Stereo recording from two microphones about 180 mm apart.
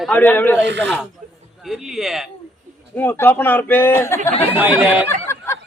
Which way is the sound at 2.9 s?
10° left (ahead or behind).